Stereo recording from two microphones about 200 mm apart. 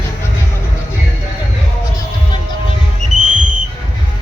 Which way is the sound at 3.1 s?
40° right (ahead or behind).